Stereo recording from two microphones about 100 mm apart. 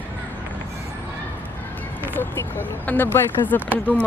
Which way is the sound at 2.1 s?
20° left (ahead or behind).